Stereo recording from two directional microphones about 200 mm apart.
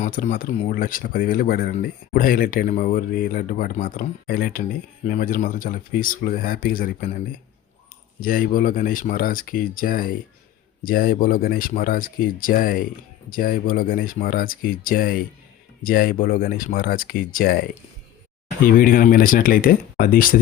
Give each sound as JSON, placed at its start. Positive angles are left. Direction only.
{"t": 0.0, "sound": "speech", "side_deg": 40}